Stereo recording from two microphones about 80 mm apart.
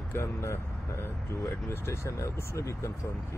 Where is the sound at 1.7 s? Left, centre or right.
Left.